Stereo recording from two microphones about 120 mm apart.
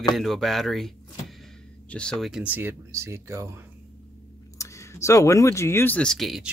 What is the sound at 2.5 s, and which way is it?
Speech, 20° right (ahead or behind).